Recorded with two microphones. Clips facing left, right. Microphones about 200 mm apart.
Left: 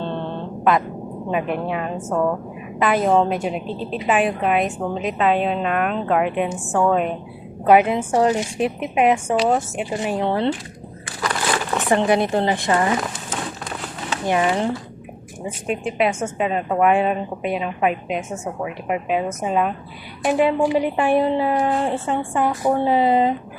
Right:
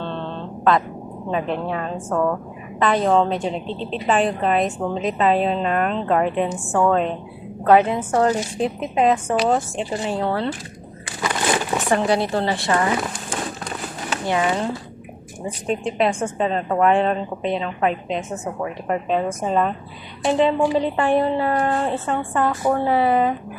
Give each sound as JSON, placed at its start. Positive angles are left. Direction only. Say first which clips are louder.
{"t": 0.0, "sound": "a sound", "louder": "left 2 dB", "side_deg": 15}
{"t": 1.3, "sound": "a woman's voice", "louder": "even", "side_deg": 10}
{"t": 11.9, "sound": "speech", "louder": "left 2 dB", "side_deg": 20}
{"t": 14.3, "sound": "speech", "louder": "left 2 dB", "side_deg": 20}
{"t": 15.6, "sound": "a woman's voice", "louder": "even", "side_deg": 5}